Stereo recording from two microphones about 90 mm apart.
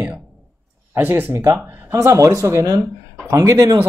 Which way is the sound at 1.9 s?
35° right (ahead or behind).